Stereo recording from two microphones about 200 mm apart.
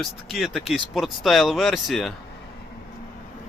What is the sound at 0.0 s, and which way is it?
Speech, centre (ahead or behind).